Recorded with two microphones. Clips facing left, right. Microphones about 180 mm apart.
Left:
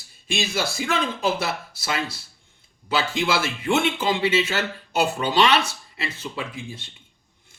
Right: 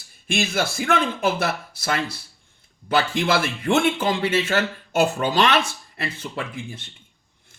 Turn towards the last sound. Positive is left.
turn(degrees=-55)  # may be behind; listen again after turning